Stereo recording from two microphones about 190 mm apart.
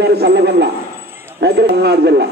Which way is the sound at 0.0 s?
60° right (ahead or behind).